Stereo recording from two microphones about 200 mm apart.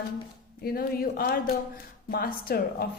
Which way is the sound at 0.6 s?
50° left (ahead or behind).